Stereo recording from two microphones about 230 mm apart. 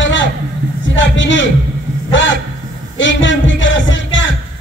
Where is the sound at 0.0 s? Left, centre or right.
Left.